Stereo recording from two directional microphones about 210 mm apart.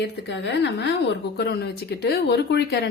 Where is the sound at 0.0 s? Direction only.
55° left (ahead or behind).